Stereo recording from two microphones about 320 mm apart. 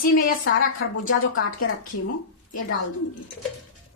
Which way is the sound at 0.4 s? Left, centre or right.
Left.